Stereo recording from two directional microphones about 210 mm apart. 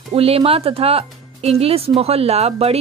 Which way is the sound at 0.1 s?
25° right (ahead or behind).